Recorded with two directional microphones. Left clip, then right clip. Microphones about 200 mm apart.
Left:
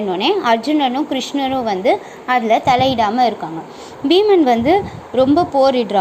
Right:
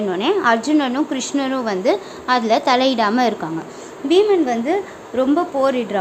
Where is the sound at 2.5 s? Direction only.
15° right (ahead or behind).